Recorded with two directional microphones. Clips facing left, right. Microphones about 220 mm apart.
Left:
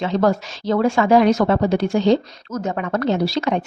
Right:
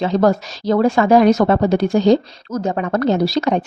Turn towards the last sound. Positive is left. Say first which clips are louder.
# right 3 dB
turn(degrees=-40)  # may be behind; listen again after turning